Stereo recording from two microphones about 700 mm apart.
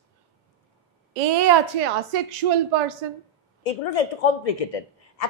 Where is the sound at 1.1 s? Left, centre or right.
Right.